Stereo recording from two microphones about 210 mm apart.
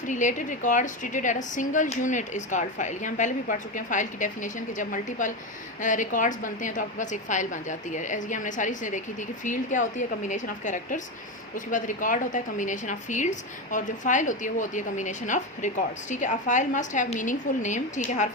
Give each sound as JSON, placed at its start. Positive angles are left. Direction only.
{"t": 0.1, "sound": "a woman's voice", "side_deg": 35}